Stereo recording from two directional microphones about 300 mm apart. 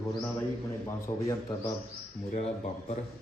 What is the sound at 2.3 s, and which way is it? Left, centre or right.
Speech, left.